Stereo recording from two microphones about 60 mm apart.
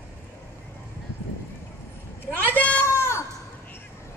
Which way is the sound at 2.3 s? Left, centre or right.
Left.